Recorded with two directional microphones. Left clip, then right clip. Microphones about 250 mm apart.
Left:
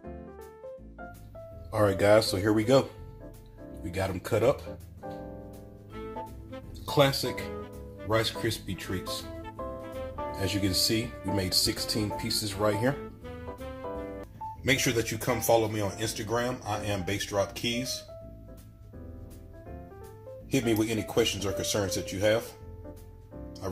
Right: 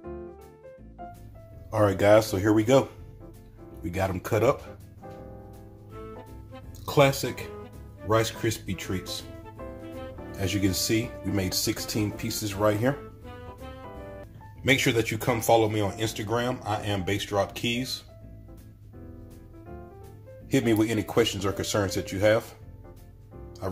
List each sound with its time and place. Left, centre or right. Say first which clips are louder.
1.7 s speech: right 3 dB; centre
3.9 s speech: right 2 dB; centre
5.9 s music: left 4 dB; centre
7.7 s speech: right 4 dB; centre
14.7 s speech: right 4 dB; centre
20.5 s speech: right 3 dB; centre